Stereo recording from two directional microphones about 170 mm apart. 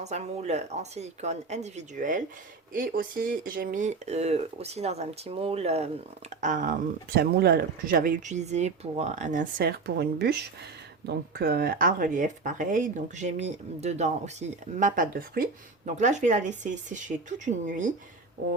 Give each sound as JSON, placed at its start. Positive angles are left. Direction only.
{"t": 0.0, "sound": "speech", "side_deg": -40}
{"t": 15.4, "sound": "speech", "side_deg": -65}
{"t": 16.0, "sound": "speech", "side_deg": -45}